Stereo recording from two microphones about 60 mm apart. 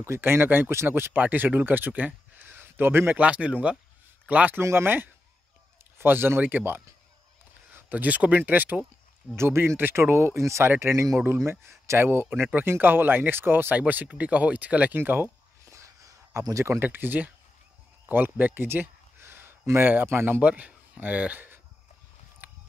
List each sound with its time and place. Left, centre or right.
0.0 s speech: right
3.2 s speech: right
4.6 s speech: right
9.3 s speech: right
10.1 s speech: right
15.6 s a sound: right
16.8 s speech: right
18.0 s a sound: right
19.9 s speech: right
20.4 s speech: right
22.4 s a sound: right